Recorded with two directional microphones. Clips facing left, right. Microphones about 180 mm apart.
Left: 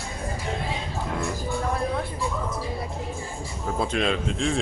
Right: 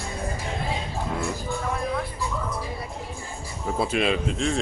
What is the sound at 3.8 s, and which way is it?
Speech, 5° right (ahead or behind).